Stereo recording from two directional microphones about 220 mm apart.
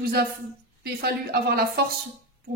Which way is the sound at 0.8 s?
45° right (ahead or behind).